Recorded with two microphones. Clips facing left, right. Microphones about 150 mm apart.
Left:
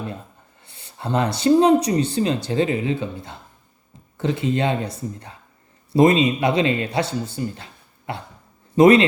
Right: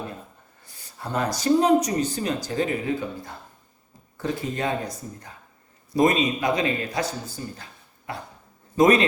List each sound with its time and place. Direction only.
0.6 s a man's voice: 25° left (ahead or behind)